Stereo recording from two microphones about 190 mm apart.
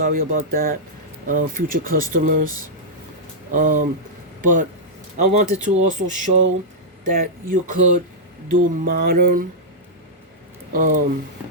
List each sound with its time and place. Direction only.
0.0 s mantra: 45° right (ahead or behind)
3.5 s mantra: 45° right (ahead or behind)
4.4 s a sound: 45° right (ahead or behind)
5.1 s speech: 40° right (ahead or behind)
7.0 s mantra: 45° right (ahead or behind)
10.7 s mantra: 45° right (ahead or behind)